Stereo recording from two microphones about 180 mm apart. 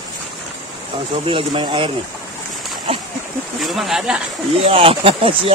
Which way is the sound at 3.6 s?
Centre (ahead or behind).